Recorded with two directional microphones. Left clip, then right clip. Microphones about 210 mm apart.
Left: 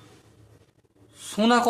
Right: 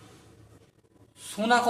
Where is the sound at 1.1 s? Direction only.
45° left (ahead or behind).